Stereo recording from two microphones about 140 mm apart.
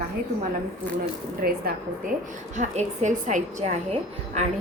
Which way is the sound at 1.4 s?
90° right.